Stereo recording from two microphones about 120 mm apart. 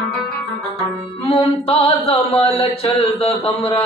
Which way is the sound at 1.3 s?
55° left (ahead or behind).